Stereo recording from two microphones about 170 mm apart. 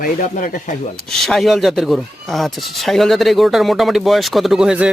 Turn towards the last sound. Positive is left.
turn(degrees=-5)  # may be behind; listen again after turning